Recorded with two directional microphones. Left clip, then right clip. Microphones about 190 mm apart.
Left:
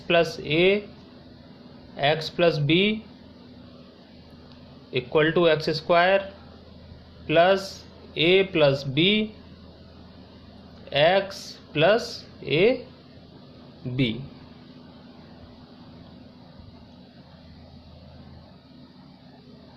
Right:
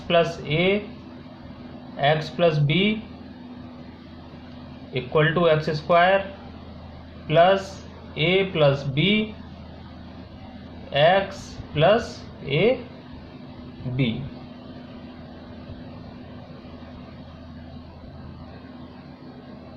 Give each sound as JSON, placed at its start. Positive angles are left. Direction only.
{"t": 0.1, "sound": "speech", "side_deg": 55}
{"t": 2.0, "sound": "speech", "side_deg": 55}
{"t": 4.9, "sound": "speech", "side_deg": 55}
{"t": 7.3, "sound": "speech", "side_deg": 55}
{"t": 10.8, "sound": "speech", "side_deg": 55}